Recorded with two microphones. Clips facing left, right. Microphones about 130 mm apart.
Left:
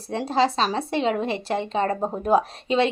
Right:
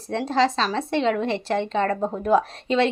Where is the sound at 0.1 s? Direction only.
10° left (ahead or behind).